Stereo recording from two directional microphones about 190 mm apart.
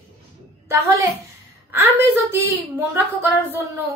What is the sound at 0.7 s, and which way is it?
A woman's voice, 15° right (ahead or behind).